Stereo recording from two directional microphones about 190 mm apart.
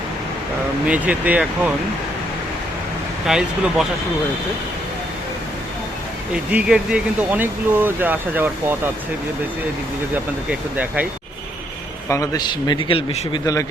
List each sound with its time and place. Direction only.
0.9 s speech: 5° right (ahead or behind)
3.2 s speech: 5° right (ahead or behind)
6.5 s speech: 5° right (ahead or behind)
10.5 s speech: 5° right (ahead or behind)
12.0 s a man's voice: 15° left (ahead or behind)